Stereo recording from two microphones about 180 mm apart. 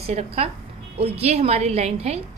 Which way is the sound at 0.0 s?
35° right (ahead or behind).